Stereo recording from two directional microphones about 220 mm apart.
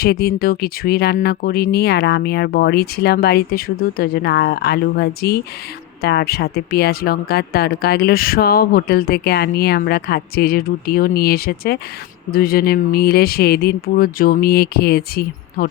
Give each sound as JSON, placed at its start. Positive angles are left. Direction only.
{"t": 0.0, "sound": "speech", "side_deg": 45}